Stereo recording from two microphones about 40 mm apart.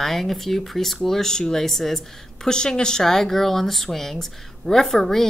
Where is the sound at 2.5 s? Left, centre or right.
Centre.